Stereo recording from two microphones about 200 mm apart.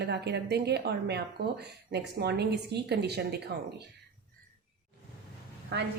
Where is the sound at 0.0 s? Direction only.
55° right (ahead or behind).